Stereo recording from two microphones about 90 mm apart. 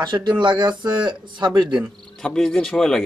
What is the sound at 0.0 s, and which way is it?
Speech, 60° right (ahead or behind).